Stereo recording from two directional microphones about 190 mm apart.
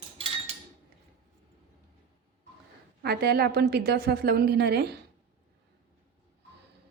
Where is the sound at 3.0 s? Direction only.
55° right (ahead or behind).